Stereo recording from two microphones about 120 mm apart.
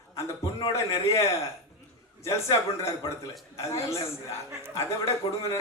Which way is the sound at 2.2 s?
25° left (ahead or behind).